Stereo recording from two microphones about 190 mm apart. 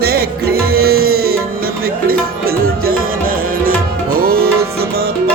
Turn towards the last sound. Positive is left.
turn(degrees=-55)  # may be behind; listen again after turning